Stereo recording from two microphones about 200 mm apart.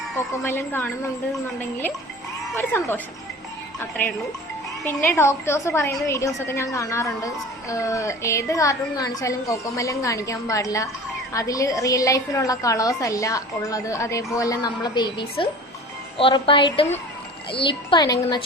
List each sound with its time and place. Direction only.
0.4 s a woman's voice: 10° left (ahead or behind)
2.6 s a woman's voice: 10° left (ahead or behind)